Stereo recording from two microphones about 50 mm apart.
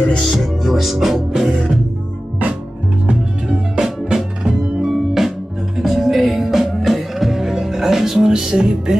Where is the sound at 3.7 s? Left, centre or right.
Centre.